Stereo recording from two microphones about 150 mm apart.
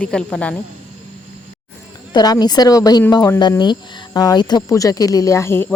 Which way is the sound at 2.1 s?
25° left (ahead or behind).